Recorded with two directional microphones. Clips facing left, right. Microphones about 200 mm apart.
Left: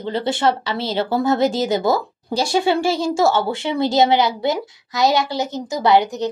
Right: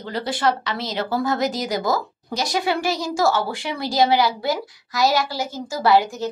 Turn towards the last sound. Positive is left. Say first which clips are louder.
# left 2 dB
turn(degrees=20)  # may be behind; listen again after turning